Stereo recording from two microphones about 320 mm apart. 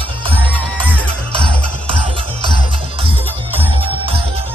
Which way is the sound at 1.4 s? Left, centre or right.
Centre.